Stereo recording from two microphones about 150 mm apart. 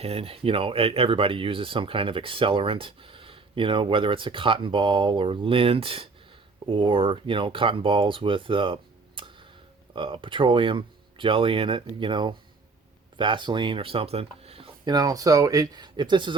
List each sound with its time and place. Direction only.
0.0 s speech: 40° right (ahead or behind)
14.8 s speech: 25° right (ahead or behind)